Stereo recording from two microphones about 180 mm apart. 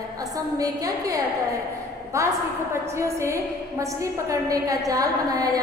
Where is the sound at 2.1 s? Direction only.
15° right (ahead or behind).